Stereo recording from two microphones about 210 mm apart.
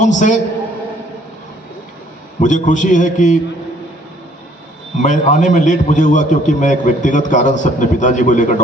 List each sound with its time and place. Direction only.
0.0 s a man's voice: 35° left (ahead or behind)
2.4 s a man's voice: 35° left (ahead or behind)
4.9 s a man's voice: 35° left (ahead or behind)